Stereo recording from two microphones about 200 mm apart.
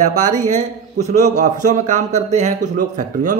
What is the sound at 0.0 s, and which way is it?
A man's voice, 35° right (ahead or behind).